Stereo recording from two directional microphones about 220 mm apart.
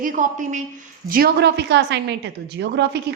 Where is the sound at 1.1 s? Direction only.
45° right (ahead or behind).